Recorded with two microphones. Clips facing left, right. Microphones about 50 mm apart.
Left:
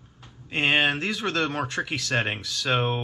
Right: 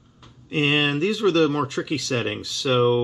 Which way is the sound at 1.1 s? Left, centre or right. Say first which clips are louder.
Right 7 dB; centre.